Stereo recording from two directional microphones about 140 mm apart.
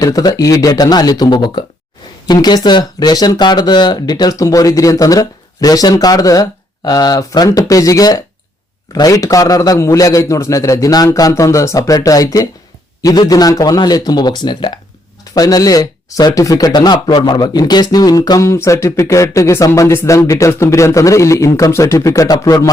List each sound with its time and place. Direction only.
0.0 s speech: 25° left (ahead or behind)